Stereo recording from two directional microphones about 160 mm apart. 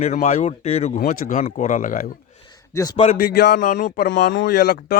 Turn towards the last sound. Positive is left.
turn(degrees=90)